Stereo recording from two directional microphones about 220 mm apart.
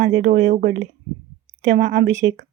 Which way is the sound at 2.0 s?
60° right (ahead or behind).